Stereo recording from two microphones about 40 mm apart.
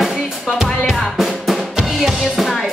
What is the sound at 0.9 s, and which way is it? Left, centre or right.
Drum kit, centre.